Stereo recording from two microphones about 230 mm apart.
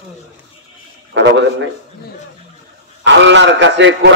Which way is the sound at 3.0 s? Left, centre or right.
Right.